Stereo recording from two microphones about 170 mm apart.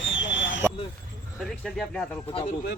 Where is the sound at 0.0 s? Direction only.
90° left.